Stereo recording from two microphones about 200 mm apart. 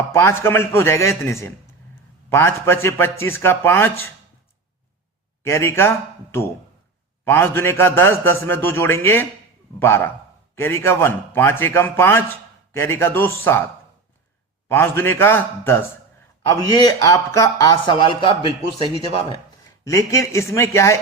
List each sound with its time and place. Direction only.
0.1 s a man's voice: 10° left (ahead or behind)
5.4 s speech: 15° left (ahead or behind)
7.3 s a man's voice: 10° left (ahead or behind)
14.7 s a man's voice: 10° left (ahead or behind); by 19.4 s 30° left (ahead or behind)
19.8 s a man's voice: 15° left (ahead or behind)